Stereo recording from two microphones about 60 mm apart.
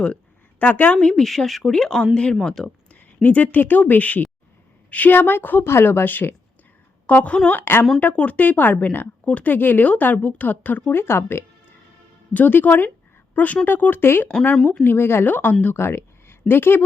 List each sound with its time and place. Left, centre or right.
0.6 s a woman's voice: left
1.0 s speech: centre
2.9 s a woman's voice: left
7.5 s speech: left
8.1 s a woman's voice: left
10.9 s speech: left
12.3 s speech: left
15.6 s a sound: left
16.5 s speech: left